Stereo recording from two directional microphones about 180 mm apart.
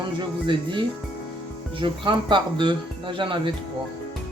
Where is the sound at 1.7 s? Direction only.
30° right (ahead or behind).